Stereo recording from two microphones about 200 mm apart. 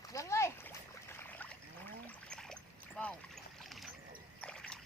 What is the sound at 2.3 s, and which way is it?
Splash, 5° left (ahead or behind).